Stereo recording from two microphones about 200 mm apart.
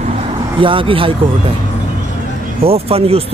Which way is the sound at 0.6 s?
25° right (ahead or behind).